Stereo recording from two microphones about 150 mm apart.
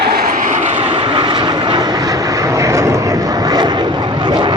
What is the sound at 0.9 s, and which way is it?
Vehicle, 30° right (ahead or behind).